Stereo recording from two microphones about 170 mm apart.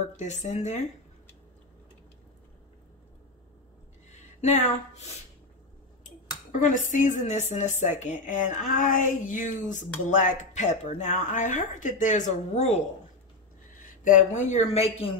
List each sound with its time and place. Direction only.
0.2 s speech: 45° left (ahead or behind)
4.1 s speech: 45° left (ahead or behind)
6.6 s speech: 50° left (ahead or behind)
13.8 s speech: 50° left (ahead or behind)
14.5 s speech: 40° left (ahead or behind)